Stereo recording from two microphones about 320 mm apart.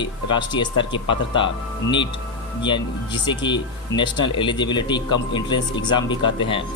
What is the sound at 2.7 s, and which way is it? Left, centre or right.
Speech, centre.